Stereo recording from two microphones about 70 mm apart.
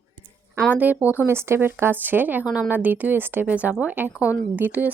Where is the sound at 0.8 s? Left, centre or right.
Right.